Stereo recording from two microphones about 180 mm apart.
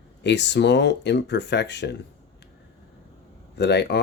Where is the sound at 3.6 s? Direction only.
65° left (ahead or behind).